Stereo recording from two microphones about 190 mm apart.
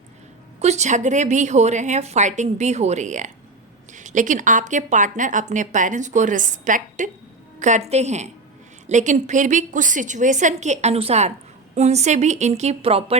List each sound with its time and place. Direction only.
0.6 s speech: 35° right (ahead or behind)